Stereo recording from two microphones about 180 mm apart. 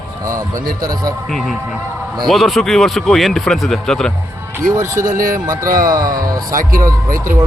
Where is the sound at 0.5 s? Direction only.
50° right (ahead or behind).